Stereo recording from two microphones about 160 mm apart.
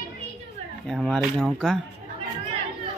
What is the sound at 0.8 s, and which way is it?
Speech, centre (ahead or behind).